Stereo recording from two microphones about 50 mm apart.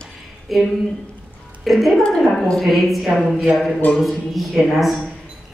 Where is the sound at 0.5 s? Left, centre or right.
Centre.